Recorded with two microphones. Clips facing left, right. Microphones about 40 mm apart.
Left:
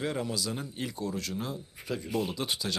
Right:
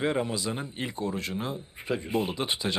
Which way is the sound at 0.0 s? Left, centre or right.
Right.